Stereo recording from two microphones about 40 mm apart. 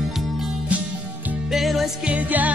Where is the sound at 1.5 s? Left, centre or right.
Centre.